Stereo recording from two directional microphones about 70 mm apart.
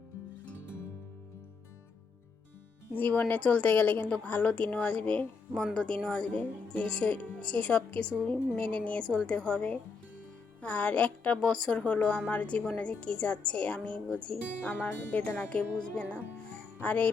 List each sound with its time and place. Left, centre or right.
2.9 s a woman's voice: left
14.7 s a woman's voice: left